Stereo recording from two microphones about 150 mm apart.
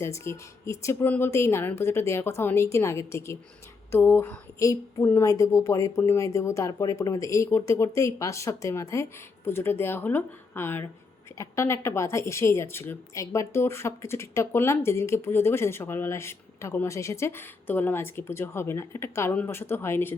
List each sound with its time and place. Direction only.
0.0 s a woman's voice: 20° left (ahead or behind)